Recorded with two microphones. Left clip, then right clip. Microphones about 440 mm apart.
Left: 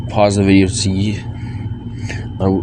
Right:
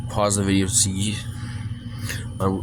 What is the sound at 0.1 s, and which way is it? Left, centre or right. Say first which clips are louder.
Speech: left 9 dB; right.